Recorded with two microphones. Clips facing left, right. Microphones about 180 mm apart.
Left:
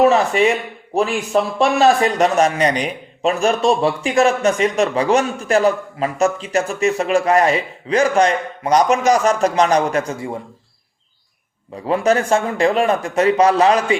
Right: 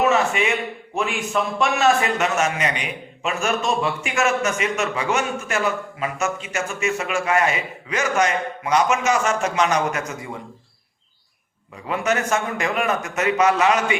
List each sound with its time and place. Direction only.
0.0 s a man's voice: 35° left (ahead or behind)
11.9 s a man's voice: 30° left (ahead or behind)